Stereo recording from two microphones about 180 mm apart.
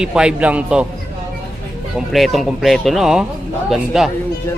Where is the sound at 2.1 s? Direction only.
Centre (ahead or behind).